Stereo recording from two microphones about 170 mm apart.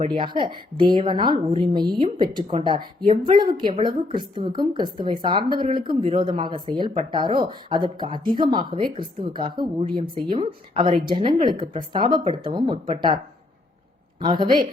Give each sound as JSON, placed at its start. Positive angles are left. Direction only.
{"t": 0.1, "sound": "a woman's voice", "side_deg": -30}
{"t": 14.2, "sound": "a woman's voice", "side_deg": -30}